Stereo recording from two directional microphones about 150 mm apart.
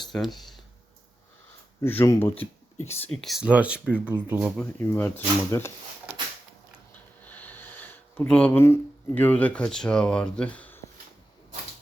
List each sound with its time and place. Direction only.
0.1 s speech: centre (ahead or behind)
1.8 s speech: 15° left (ahead or behind)
3.2 s speech: centre (ahead or behind)
4.5 s speech: 10° left (ahead or behind)
7.3 s speech: 10° left (ahead or behind)